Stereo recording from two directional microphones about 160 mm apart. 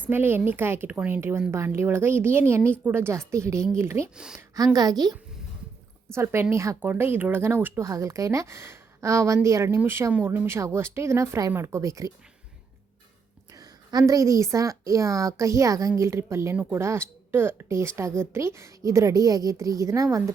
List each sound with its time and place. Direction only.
0.0 s speech: 15° right (ahead or behind)
4.1 s speech: 5° right (ahead or behind)
4.4 s a woman's voice: 20° right (ahead or behind)
6.1 s speech: 15° right (ahead or behind)
13.5 s a sound: 25° right (ahead or behind)
14.1 s a woman's voice: 20° right (ahead or behind)